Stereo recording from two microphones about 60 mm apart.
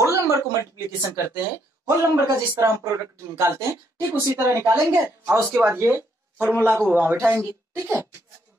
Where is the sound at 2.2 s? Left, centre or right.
Right.